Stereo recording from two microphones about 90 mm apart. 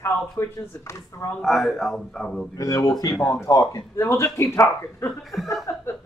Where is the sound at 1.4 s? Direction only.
Centre (ahead or behind).